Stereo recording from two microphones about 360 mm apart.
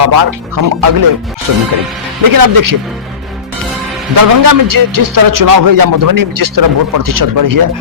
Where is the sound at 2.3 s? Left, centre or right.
Right.